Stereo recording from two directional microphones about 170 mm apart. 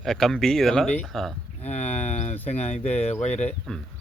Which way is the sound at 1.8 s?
10° left (ahead or behind).